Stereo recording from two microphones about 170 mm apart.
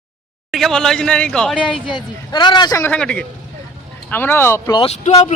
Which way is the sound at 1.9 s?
25° left (ahead or behind).